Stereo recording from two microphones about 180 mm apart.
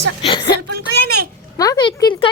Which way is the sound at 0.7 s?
65° right (ahead or behind).